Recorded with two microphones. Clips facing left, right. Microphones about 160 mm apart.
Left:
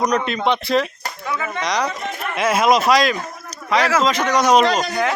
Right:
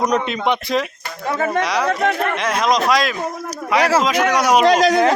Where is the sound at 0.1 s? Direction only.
15° right (ahead or behind).